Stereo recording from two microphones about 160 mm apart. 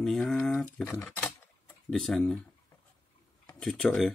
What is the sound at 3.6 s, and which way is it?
Speech, 5° left (ahead or behind).